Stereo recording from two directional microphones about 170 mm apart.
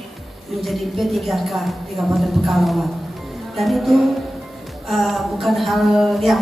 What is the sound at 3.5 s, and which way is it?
Speech, centre (ahead or behind).